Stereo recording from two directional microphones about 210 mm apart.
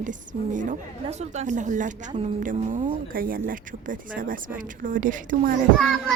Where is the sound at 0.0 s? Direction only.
35° right (ahead or behind).